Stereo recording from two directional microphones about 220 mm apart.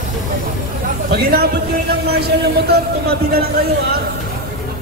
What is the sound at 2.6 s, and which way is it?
Speech, 45° right (ahead or behind).